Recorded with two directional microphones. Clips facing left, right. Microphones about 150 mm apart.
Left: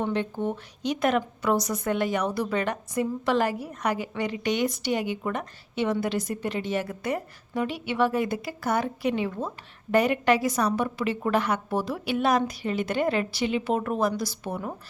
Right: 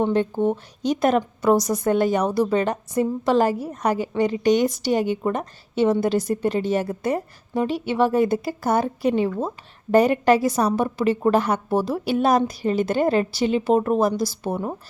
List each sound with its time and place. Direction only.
0.1 s a woman's voice: 40° right (ahead or behind)